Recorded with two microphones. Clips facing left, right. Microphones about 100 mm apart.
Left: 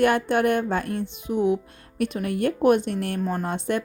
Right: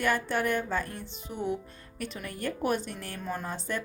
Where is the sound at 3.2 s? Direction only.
45° left (ahead or behind).